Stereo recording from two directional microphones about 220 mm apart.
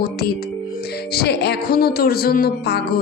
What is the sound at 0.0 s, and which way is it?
Speech, 45° left (ahead or behind).